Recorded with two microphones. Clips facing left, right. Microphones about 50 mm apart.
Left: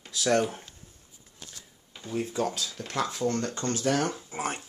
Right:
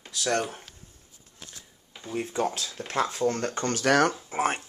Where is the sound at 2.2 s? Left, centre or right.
Right.